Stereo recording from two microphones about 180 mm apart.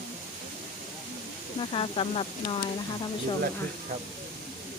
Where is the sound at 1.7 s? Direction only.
30° left (ahead or behind).